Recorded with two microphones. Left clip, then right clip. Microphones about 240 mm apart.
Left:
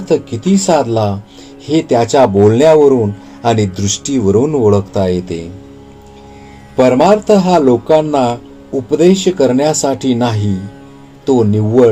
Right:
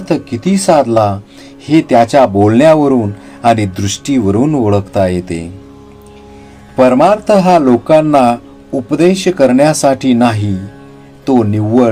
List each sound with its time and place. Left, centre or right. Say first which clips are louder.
0.1 s speech: left 2 dB; right
6.7 s speech: right 1 dB; right